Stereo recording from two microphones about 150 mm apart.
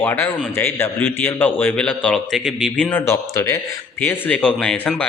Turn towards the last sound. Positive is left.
turn(degrees=5)  # may be behind; listen again after turning